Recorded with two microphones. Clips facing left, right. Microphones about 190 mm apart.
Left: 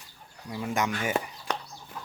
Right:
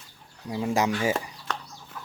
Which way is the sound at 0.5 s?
30° right (ahead or behind).